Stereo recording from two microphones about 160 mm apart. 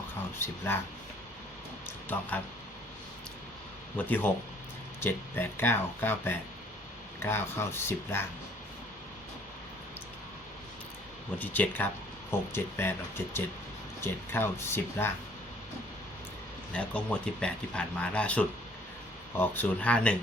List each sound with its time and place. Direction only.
0.3 s speech: 15° left (ahead or behind)
3.9 s speech: 10° left (ahead or behind)
11.3 s speech: 10° left (ahead or behind)
16.7 s speech: 5° left (ahead or behind)